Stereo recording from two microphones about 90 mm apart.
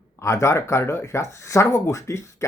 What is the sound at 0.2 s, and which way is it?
Speech, 35° left (ahead or behind).